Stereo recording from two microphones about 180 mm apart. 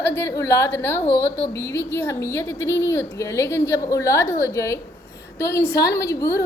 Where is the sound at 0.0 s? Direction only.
15° left (ahead or behind).